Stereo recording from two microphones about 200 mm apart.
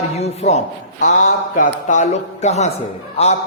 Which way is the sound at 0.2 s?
30° left (ahead or behind).